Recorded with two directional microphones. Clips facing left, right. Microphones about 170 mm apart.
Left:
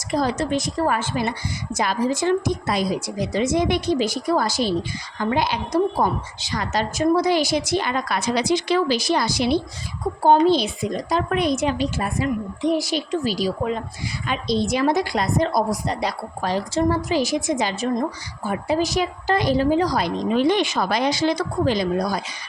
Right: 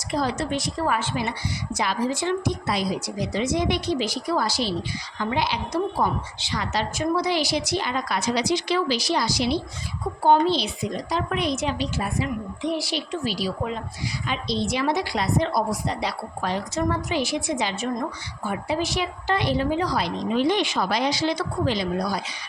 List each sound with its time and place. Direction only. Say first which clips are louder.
0.1 s a woman's voice: left 3 dB; 45° left (ahead or behind)